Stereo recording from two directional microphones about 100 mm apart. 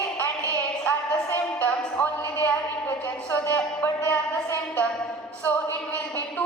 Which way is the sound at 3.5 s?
30° left (ahead or behind).